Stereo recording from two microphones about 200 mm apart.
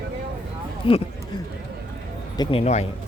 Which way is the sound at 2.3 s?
25° left (ahead or behind).